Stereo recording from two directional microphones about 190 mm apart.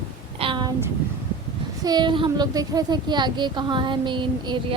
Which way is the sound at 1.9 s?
25° right (ahead or behind).